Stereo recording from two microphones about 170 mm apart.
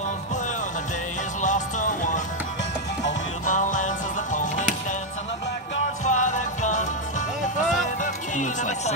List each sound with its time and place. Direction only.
1.4 s music: 45° left (ahead or behind)
3.4 s music: 45° left (ahead or behind)
6.0 s music: 45° left (ahead or behind)